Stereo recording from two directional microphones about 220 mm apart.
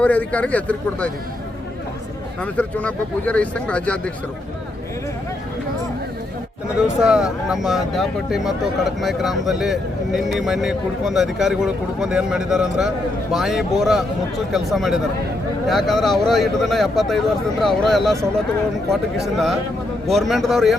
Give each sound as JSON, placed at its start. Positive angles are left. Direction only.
{"t": 0.0, "sound": "speech", "side_deg": 5}
{"t": 2.4, "sound": "speech", "side_deg": 5}
{"t": 6.7, "sound": "speech", "side_deg": -5}
{"t": 20.1, "sound": "speech", "side_deg": 0}